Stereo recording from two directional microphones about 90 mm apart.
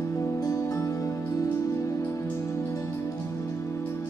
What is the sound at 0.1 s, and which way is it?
Music, 35° left (ahead or behind).